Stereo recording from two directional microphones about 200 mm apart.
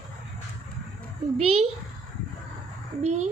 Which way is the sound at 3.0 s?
35° right (ahead or behind).